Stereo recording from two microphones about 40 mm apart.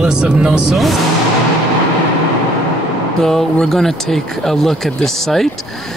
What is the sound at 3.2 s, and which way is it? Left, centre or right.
Speech, centre.